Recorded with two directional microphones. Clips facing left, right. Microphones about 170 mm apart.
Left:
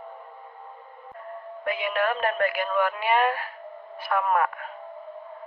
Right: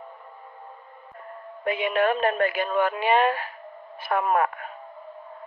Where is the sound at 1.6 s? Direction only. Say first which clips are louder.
Right 3 dB; 20° right (ahead or behind).